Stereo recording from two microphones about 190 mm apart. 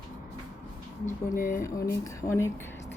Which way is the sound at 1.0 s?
45° left (ahead or behind).